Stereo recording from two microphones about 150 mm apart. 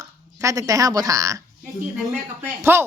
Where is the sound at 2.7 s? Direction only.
15° right (ahead or behind).